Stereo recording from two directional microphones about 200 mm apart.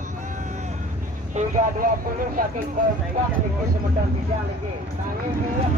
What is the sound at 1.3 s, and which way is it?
Vehicle, 45° right (ahead or behind).